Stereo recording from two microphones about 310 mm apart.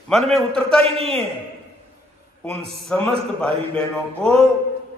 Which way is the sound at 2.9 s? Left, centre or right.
Centre.